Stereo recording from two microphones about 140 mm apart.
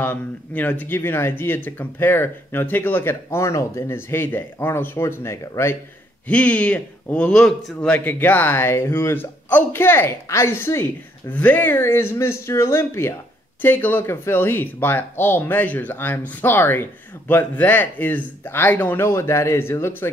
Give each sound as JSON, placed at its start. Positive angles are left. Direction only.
{"t": 0.0, "sound": "speech", "side_deg": 15}
{"t": 6.2, "sound": "speech", "side_deg": 10}